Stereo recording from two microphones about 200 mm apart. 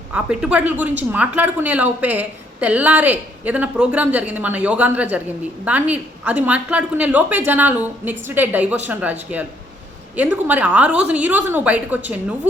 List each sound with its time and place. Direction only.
0.1 s a woman's voice: 5° right (ahead or behind)
10.2 s a woman's voice: 10° right (ahead or behind)